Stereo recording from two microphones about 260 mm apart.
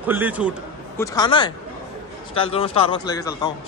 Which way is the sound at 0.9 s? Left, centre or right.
Centre.